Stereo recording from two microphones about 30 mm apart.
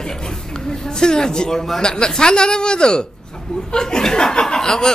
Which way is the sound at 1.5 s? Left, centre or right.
Centre.